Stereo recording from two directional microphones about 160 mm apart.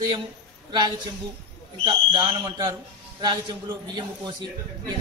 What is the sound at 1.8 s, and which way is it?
A man's voice, 30° right (ahead or behind).